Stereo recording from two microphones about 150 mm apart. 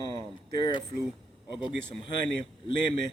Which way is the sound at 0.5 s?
30° left (ahead or behind).